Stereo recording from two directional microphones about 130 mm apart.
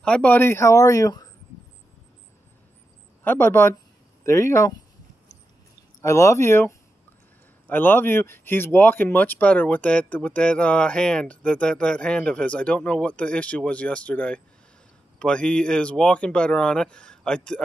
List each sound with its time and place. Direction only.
0.0 s speech: 10° left (ahead or behind); by 1.3 s 25° left (ahead or behind)
3.3 s speech: 20° left (ahead or behind)
5.9 s speech: 25° left (ahead or behind); by 17.6 s 5° left (ahead or behind)